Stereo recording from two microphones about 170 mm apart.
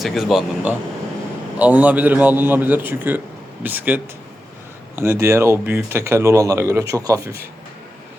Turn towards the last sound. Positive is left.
turn(degrees=-20)  # may be behind; listen again after turning